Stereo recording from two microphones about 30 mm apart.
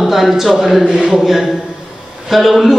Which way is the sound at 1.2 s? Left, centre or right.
Centre.